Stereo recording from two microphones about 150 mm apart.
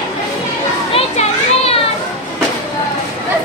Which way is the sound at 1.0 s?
40° left (ahead or behind).